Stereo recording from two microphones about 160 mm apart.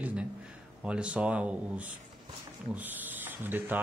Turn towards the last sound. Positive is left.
turn(degrees=-10)  # may be behind; listen again after turning